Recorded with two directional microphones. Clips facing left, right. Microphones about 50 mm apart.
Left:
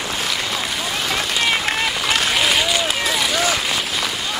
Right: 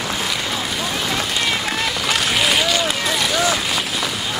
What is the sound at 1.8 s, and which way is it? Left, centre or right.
Applause, centre.